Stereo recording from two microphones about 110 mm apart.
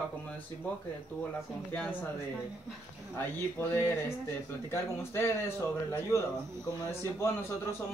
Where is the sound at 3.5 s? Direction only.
20° left (ahead or behind).